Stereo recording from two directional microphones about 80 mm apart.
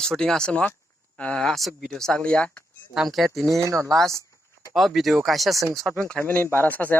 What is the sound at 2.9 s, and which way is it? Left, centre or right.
Speech, centre.